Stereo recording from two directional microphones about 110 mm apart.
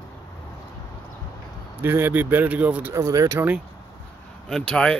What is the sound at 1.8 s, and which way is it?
A man's voice, 20° right (ahead or behind).